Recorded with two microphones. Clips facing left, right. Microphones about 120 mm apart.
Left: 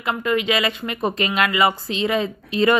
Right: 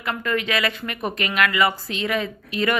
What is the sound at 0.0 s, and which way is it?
Speech, 20° left (ahead or behind).